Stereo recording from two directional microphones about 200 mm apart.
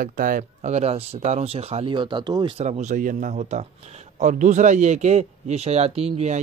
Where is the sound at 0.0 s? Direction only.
45° right (ahead or behind).